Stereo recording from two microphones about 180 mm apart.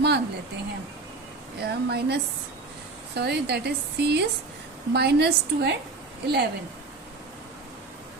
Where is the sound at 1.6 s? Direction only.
65° right (ahead or behind).